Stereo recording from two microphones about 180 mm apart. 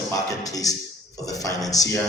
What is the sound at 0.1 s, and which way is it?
A man's voice, 20° left (ahead or behind).